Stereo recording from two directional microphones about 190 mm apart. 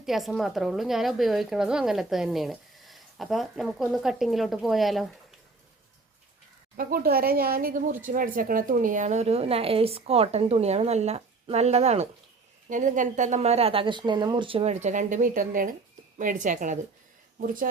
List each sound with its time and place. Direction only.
0.0 s a woman's voice: centre (ahead or behind)
6.7 s a woman's voice: 50° right (ahead or behind)